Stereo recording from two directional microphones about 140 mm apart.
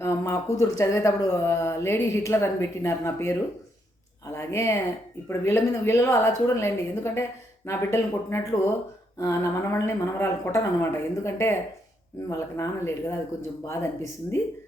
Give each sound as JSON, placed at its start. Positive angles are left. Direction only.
{"t": 0.0, "sound": "speech", "side_deg": 20}